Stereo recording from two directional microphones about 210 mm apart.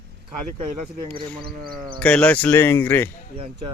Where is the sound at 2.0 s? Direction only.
5° left (ahead or behind).